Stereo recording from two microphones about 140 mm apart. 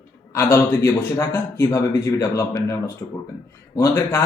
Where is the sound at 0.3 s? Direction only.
20° left (ahead or behind).